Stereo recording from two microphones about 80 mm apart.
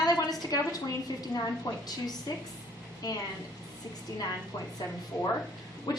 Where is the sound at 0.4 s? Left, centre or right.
Left.